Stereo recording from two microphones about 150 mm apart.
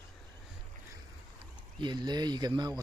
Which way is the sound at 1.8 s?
30° right (ahead or behind).